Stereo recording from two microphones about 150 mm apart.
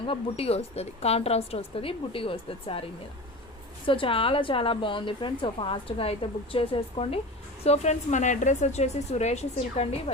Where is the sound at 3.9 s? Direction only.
35° left (ahead or behind).